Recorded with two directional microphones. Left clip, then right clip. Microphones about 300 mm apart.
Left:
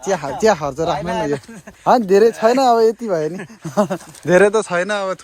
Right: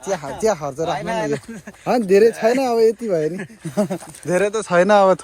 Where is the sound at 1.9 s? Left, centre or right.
Left.